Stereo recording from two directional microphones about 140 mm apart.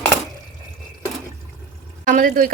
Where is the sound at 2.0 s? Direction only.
80° right.